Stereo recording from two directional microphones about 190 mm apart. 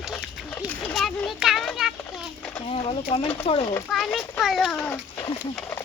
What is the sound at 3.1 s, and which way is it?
Speech, 30° left (ahead or behind).